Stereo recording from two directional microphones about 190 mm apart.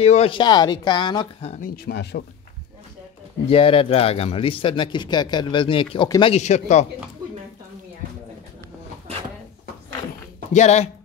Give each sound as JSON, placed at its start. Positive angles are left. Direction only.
{"t": 0.0, "sound": "speech", "side_deg": 30}
{"t": 1.8, "sound": "speech", "side_deg": 55}
{"t": 3.4, "sound": "speech", "side_deg": 30}
{"t": 6.3, "sound": "a man's voice", "side_deg": 35}
{"t": 10.5, "sound": "a man's voice", "side_deg": 35}